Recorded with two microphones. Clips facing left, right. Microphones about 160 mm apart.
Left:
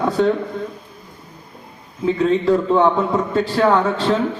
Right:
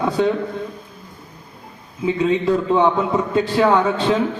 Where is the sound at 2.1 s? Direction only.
5° right (ahead or behind).